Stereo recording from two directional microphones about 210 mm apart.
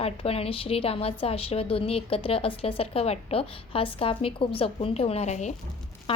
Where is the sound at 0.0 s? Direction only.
30° left (ahead or behind).